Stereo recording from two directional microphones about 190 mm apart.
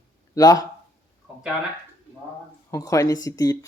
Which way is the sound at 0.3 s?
20° left (ahead or behind).